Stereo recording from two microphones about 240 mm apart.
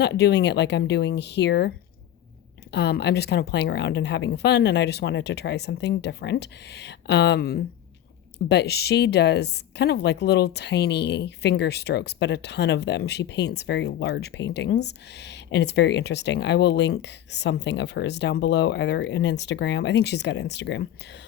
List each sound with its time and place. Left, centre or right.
0.0 s a woman's voice: left
2.7 s a woman's voice: left